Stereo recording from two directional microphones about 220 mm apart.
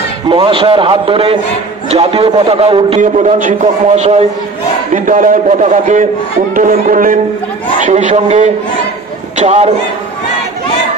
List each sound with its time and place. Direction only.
0.3 s a man's voice: 25° right (ahead or behind)